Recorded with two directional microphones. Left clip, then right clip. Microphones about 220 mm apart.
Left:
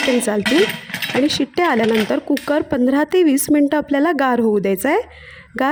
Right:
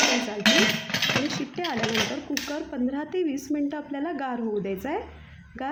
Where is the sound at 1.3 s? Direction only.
45° left (ahead or behind).